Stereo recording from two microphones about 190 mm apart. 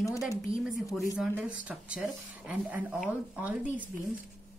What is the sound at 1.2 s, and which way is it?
A woman's voice, 10° right (ahead or behind).